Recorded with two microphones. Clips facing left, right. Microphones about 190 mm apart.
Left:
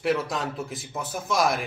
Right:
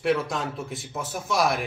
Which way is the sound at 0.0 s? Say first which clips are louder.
Right 1 dB; centre (ahead or behind).